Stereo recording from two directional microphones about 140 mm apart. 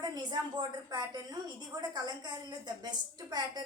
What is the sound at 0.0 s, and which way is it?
A woman's voice, 30° right (ahead or behind).